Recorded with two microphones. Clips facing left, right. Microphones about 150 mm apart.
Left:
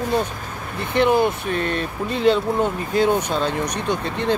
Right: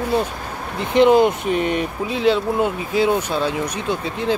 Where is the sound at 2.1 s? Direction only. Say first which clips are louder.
Left 1 dB; centre (ahead or behind).